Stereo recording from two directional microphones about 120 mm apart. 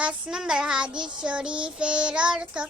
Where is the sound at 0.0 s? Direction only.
5° right (ahead or behind).